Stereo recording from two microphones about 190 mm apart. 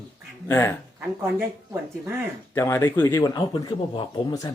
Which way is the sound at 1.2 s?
10° right (ahead or behind).